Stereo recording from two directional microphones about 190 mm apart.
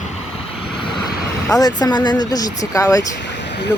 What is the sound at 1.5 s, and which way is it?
Speech, 20° left (ahead or behind).